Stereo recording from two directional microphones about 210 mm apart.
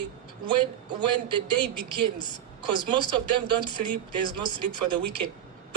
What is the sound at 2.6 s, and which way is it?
A man's voice, 20° right (ahead or behind).